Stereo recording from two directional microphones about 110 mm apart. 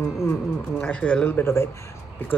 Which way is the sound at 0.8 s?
10° left (ahead or behind).